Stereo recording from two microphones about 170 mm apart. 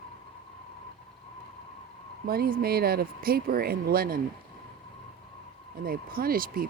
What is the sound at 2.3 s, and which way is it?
Speech, 65° right (ahead or behind).